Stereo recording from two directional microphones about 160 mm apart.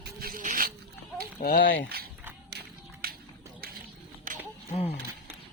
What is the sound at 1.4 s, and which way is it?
Speech, 60° left (ahead or behind).